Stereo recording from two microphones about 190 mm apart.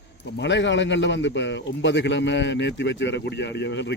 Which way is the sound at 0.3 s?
70° left (ahead or behind).